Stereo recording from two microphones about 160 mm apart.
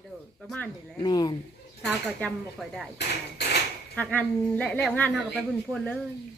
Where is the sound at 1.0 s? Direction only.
25° left (ahead or behind).